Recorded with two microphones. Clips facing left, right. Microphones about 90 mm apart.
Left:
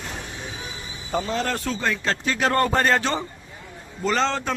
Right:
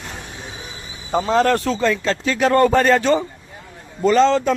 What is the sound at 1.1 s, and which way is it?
Speech, 45° right (ahead or behind).